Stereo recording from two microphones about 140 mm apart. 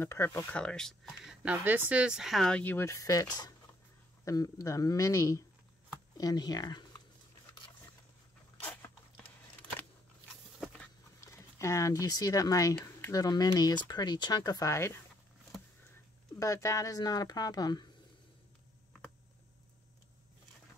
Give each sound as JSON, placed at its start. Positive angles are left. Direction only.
{"t": 0.0, "sound": "speech", "side_deg": 20}
{"t": 0.6, "sound": "speech", "side_deg": 5}
{"t": 8.5, "sound": "dog", "side_deg": 15}
{"t": 10.6, "sound": "a sound", "side_deg": 5}
{"t": 11.3, "sound": "speech", "side_deg": 20}
{"t": 16.3, "sound": "speech", "side_deg": 20}